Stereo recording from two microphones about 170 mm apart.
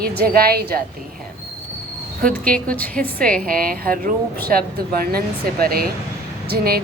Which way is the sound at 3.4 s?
55° right (ahead or behind).